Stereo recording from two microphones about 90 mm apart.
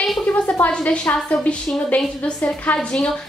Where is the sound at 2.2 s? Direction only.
15° left (ahead or behind).